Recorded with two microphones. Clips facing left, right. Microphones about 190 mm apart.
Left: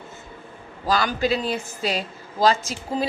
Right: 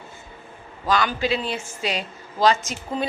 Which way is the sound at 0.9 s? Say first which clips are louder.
Even; 35° left (ahead or behind).